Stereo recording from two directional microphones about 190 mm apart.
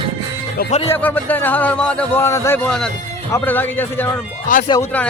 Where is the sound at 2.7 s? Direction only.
Centre (ahead or behind).